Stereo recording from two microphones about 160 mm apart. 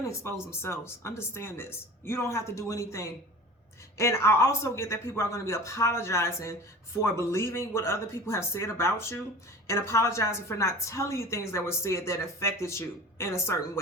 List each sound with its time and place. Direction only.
0.1 s a woman's voice: 15° left (ahead or behind)